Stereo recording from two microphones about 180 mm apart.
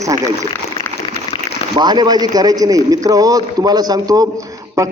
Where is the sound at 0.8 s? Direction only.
30° left (ahead or behind).